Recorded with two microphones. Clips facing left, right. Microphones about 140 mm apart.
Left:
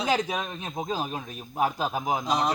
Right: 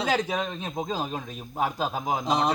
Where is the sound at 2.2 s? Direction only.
25° right (ahead or behind).